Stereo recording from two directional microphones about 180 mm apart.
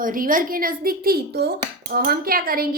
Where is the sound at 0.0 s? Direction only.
50° right (ahead or behind).